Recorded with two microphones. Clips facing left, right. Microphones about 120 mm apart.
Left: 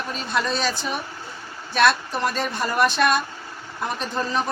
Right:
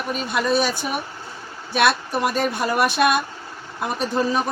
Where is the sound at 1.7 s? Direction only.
10° right (ahead or behind).